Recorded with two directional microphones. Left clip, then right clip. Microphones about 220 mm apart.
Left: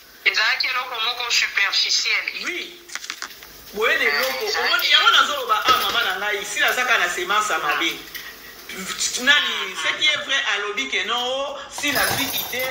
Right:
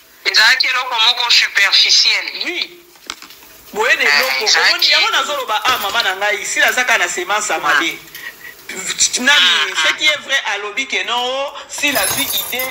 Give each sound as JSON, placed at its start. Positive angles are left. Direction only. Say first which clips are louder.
{"t": 0.2, "sound": "a man's voice", "louder": "right 8 dB", "side_deg": -40}
{"t": 3.8, "sound": "a man's voice", "louder": "right 6 dB", "side_deg": -45}